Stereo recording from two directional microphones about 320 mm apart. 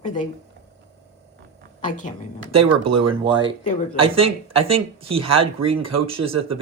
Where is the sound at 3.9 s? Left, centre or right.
Centre.